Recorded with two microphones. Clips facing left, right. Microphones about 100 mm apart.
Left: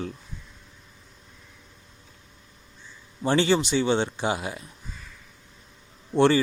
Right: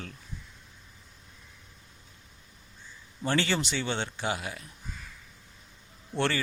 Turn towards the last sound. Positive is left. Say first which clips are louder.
# left 10 dB
turn(degrees=20)  # may be behind; listen again after turning